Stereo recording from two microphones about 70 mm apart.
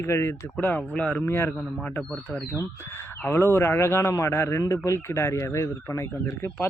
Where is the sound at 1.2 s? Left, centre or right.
Left.